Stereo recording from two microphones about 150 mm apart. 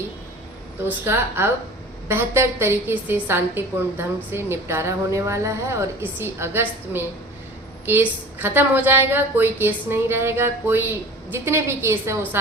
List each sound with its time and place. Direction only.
0.9 s a woman's voice: 15° right (ahead or behind)